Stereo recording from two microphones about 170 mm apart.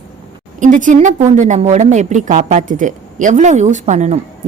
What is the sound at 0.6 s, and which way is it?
A woman's voice, 50° right (ahead or behind).